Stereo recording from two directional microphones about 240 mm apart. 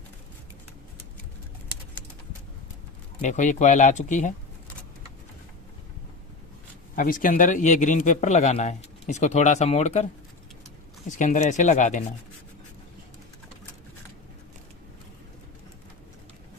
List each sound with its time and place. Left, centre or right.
3.2 s a man's voice: left
6.9 s a man's voice: left
11.2 s a man's voice: left